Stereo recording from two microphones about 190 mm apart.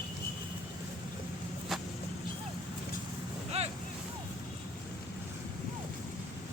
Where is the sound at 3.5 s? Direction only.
35° right (ahead or behind).